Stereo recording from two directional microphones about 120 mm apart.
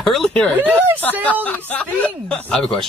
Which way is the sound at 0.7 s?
15° right (ahead or behind).